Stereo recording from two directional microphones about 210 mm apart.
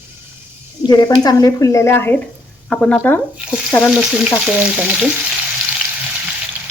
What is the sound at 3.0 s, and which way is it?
Speech, 10° left (ahead or behind).